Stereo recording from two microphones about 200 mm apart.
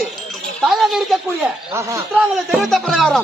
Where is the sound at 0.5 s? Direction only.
Centre (ahead or behind).